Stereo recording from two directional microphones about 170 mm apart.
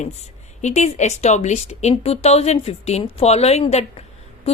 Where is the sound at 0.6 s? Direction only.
40° left (ahead or behind).